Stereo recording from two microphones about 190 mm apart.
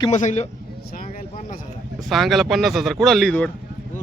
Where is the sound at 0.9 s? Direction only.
45° left (ahead or behind).